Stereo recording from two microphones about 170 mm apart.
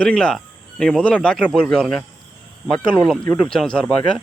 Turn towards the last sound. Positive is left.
turn(degrees=5)  # may be behind; listen again after turning